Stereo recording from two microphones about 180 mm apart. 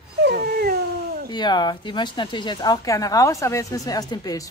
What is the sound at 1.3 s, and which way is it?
Speech, 25° left (ahead or behind).